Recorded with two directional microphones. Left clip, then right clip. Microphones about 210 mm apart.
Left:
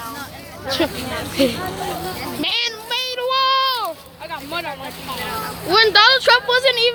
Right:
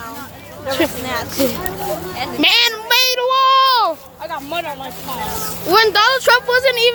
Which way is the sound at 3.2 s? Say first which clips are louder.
Right 1 dB; 20° right (ahead or behind).